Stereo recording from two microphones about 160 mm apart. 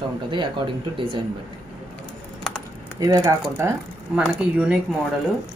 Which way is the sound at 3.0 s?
20° right (ahead or behind).